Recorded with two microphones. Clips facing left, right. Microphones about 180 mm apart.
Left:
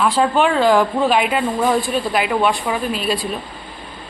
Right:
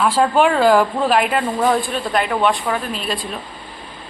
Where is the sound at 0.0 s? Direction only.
5° right (ahead or behind).